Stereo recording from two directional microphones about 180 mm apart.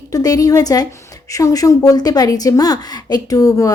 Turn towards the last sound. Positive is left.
turn(degrees=20)  # may be behind; listen again after turning